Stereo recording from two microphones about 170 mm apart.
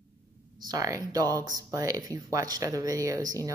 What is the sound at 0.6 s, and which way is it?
A woman's voice, 20° right (ahead or behind).